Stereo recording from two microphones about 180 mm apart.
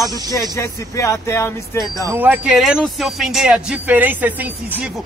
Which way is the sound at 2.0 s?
10° right (ahead or behind).